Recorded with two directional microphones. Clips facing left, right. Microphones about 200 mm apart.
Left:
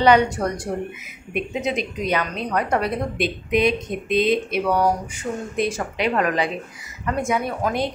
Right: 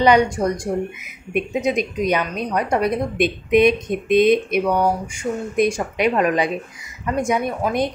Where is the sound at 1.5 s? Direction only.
15° right (ahead or behind).